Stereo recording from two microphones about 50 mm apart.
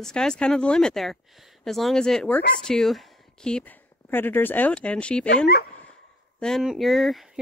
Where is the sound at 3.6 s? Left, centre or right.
Left.